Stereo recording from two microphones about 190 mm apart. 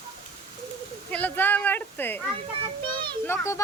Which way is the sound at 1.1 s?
10° left (ahead or behind).